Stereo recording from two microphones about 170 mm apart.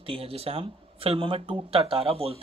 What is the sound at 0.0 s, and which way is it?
Speech, 35° right (ahead or behind).